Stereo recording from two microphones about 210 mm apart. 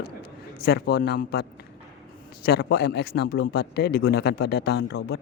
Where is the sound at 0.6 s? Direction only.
50° left (ahead or behind).